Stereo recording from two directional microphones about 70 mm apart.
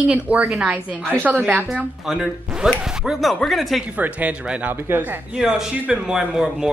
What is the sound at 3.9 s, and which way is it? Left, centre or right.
A woman's voice, right.